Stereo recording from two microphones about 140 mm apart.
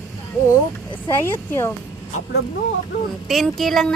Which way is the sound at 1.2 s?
20° left (ahead or behind).